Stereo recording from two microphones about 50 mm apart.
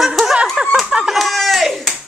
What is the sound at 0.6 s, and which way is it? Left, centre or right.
Speech, centre.